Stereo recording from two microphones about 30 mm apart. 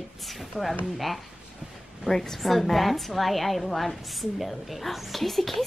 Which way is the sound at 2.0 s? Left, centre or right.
Centre.